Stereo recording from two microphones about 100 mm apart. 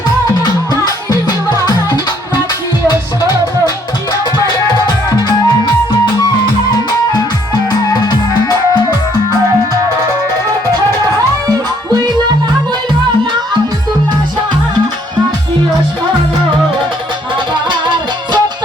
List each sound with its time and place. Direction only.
1.5 s music: 40° left (ahead or behind)
6.1 s music: 45° left (ahead or behind)
17.7 s music: 50° right (ahead or behind)